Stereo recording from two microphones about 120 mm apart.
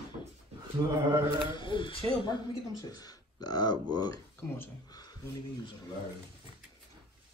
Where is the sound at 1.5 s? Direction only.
45° left (ahead or behind).